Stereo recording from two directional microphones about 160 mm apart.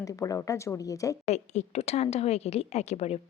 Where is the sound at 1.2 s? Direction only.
45° left (ahead or behind).